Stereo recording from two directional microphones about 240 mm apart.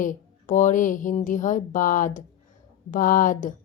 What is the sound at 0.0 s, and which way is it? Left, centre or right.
A woman's voice, left.